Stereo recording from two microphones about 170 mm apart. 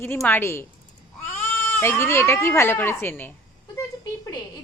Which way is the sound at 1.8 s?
15° left (ahead or behind).